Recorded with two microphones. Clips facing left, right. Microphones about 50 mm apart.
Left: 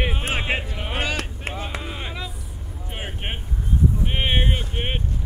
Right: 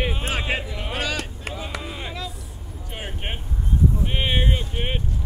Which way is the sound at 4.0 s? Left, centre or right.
Centre.